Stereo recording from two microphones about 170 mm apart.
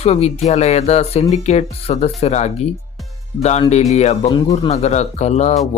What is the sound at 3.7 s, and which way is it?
Speech, 40° left (ahead or behind).